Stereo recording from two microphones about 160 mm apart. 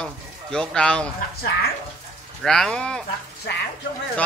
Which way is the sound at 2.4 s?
5° left (ahead or behind).